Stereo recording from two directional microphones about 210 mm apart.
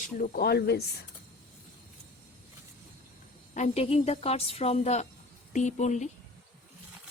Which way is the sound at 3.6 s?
30° left (ahead or behind).